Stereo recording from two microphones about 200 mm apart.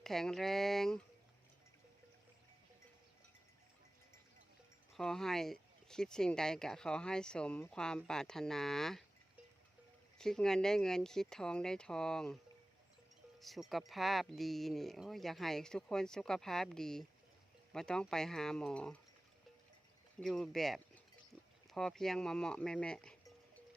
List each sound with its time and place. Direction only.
0.0 s speech: centre (ahead or behind)
4.9 s speech: centre (ahead or behind)
10.2 s speech: 5° left (ahead or behind)
13.4 s speech: centre (ahead or behind)
20.1 s speech: centre (ahead or behind)